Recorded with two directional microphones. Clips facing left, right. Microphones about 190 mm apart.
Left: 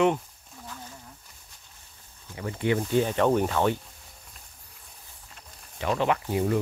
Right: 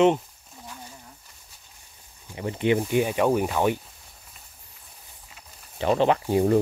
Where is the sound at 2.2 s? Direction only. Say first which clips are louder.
Right 3 dB; 20° right (ahead or behind).